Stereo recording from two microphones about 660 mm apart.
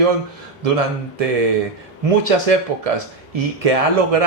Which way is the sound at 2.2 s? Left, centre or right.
Right.